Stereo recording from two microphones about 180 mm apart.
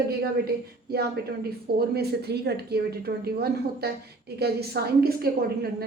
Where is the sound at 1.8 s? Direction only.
65° right (ahead or behind).